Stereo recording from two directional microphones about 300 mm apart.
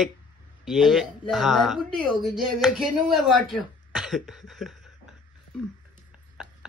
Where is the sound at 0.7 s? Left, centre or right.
Centre.